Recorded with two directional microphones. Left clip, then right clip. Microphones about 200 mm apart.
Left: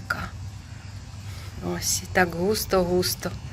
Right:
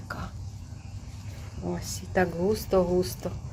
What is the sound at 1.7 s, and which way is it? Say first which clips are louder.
Speech: left 7 dB; centre (ahead or behind).